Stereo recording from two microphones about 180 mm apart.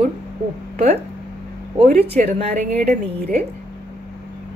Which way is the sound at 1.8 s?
35° right (ahead or behind).